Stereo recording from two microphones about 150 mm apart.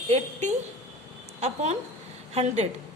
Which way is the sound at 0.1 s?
50° right (ahead or behind).